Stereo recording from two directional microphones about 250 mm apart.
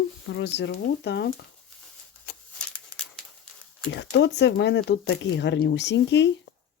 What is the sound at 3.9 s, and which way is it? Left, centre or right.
Speech, left.